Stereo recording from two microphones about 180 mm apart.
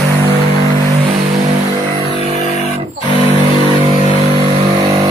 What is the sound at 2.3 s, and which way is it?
Guitar, 35° right (ahead or behind).